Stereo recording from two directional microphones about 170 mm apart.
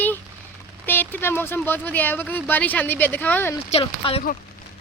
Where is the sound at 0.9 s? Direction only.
10° left (ahead or behind).